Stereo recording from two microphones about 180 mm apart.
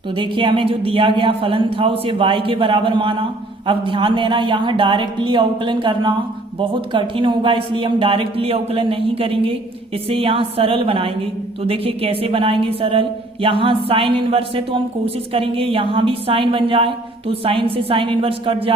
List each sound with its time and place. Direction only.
0.2 s a woman's voice: 30° right (ahead or behind)